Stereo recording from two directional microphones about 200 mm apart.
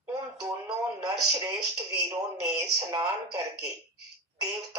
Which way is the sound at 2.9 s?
15° right (ahead or behind).